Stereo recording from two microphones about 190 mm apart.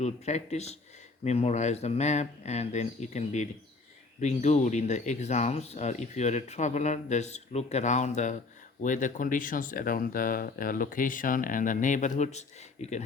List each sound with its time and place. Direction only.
0.0 s speech: 35° left (ahead or behind)